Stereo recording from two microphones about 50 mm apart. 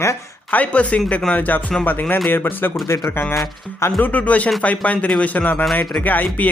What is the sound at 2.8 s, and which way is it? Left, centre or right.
Speech, left.